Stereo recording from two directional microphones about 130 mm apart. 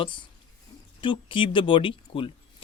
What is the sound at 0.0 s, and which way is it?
Speech, 40° left (ahead or behind).